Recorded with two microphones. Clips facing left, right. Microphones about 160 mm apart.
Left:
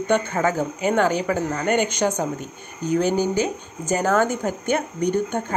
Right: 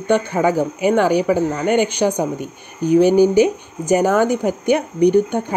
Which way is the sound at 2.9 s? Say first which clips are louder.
Right 8 dB; 15° right (ahead or behind).